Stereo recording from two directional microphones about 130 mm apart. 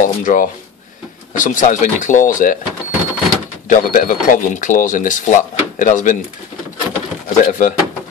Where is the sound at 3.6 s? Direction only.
90° left.